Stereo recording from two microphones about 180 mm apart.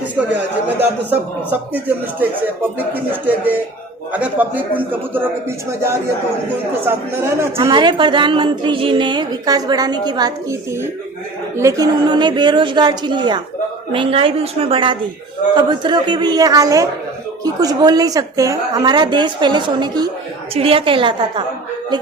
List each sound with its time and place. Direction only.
0.8 s a man's voice: 10° right (ahead or behind)
7.6 s a woman's voice: 25° right (ahead or behind)